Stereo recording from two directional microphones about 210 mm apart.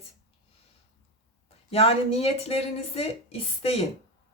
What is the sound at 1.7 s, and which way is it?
Speech, 30° left (ahead or behind).